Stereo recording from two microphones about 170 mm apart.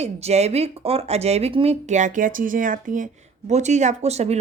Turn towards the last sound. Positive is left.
turn(degrees=-40)  # may be behind; listen again after turning